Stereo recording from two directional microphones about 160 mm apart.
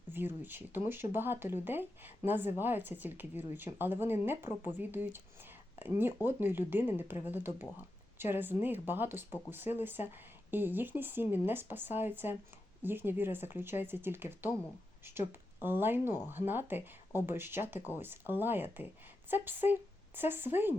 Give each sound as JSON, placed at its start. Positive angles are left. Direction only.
{"t": 0.1, "sound": "speech", "side_deg": -15}